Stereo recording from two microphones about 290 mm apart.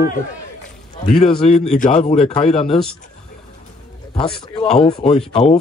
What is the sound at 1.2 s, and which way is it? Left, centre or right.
Speech, centre.